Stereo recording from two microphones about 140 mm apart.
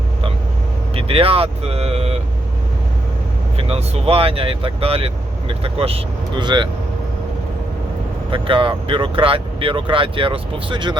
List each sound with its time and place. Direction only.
0.9 s speech: 40° right (ahead or behind)
3.6 s speech: 45° right (ahead or behind)
8.3 s speech: 40° right (ahead or behind)